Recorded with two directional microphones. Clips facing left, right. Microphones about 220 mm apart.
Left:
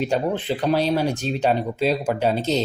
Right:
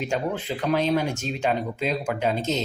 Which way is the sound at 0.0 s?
35° left (ahead or behind).